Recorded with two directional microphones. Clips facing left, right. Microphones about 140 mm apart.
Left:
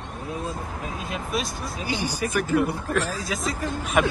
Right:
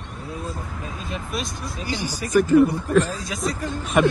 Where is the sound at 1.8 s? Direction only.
10° left (ahead or behind).